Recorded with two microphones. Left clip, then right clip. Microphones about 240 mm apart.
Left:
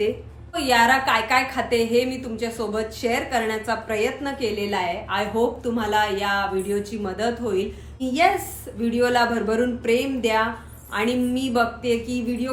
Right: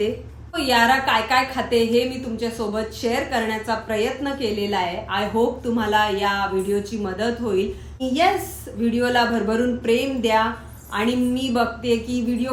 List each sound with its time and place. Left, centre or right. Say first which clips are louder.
0.5 s a woman's voice: even; centre
8.8 s a woman's voice: even; centre